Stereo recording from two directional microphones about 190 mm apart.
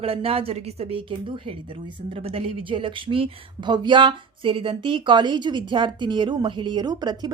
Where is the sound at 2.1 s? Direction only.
30° right (ahead or behind).